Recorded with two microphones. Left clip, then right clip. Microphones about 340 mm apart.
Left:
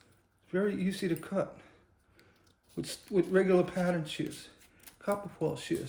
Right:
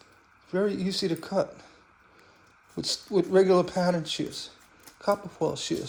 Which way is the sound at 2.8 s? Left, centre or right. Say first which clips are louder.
Right 5 dB; centre.